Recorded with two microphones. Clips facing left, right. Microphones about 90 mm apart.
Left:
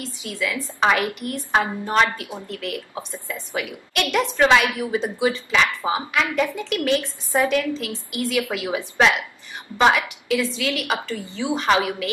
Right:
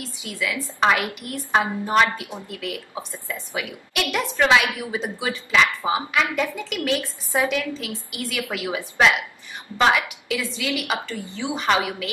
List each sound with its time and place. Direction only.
0.3 s a woman's voice: 5° right (ahead or behind)